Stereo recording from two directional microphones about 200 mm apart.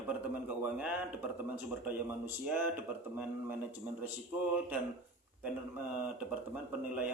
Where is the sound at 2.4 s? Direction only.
10° right (ahead or behind).